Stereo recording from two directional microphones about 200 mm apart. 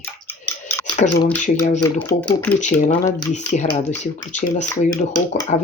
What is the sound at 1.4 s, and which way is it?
Speech, 35° left (ahead or behind).